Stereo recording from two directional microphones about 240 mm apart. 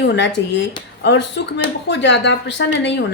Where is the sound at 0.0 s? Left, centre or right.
Left.